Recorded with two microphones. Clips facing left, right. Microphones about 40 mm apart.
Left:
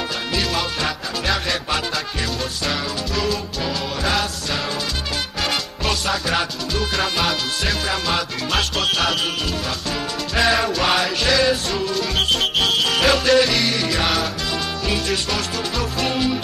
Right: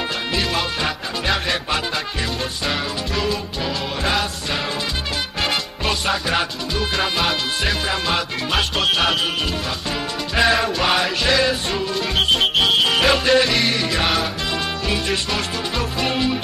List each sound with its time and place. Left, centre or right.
0.3 s music: centre
2.6 s music: centre
5.4 s music: centre
10.3 s music: centre